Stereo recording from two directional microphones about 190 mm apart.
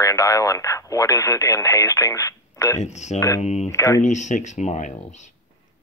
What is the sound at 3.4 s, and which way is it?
Speech, 35° left (ahead or behind).